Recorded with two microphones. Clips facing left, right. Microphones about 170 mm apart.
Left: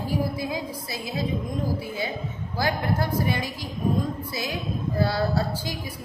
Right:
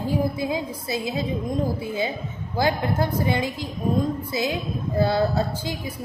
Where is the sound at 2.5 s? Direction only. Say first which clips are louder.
Right 3 dB; 20° right (ahead or behind).